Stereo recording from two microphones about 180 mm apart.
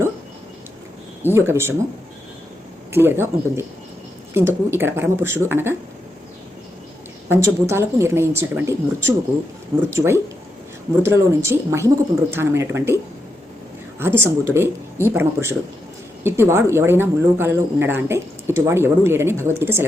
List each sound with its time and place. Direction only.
1.2 s a woman's voice: 15° right (ahead or behind)
2.9 s a woman's voice: 15° right (ahead or behind)
7.3 s a woman's voice: 15° right (ahead or behind)
14.0 s a woman's voice: 15° right (ahead or behind)